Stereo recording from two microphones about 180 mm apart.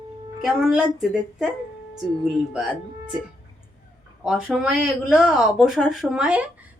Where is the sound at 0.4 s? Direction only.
5° right (ahead or behind).